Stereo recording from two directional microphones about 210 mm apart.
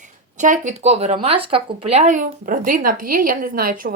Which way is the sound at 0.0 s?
35° right (ahead or behind).